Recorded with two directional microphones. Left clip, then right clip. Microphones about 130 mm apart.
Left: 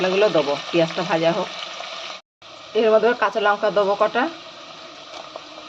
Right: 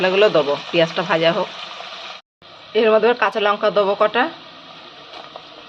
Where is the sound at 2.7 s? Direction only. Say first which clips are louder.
Right 2 dB; 5° right (ahead or behind).